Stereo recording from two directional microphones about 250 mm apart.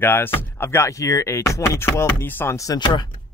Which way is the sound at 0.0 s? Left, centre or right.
Centre.